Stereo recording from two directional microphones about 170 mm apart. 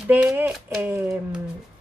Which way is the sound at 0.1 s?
10° right (ahead or behind).